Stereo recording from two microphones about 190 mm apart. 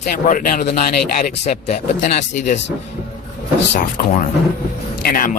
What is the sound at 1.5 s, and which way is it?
Speech, 35° left (ahead or behind).